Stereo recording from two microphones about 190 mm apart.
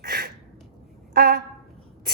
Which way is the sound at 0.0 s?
55° right (ahead or behind).